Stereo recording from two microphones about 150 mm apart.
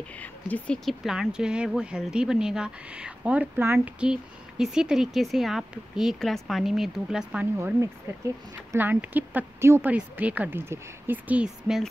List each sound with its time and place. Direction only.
0.2 s speech: 10° left (ahead or behind)
7.5 s speech: 20° right (ahead or behind)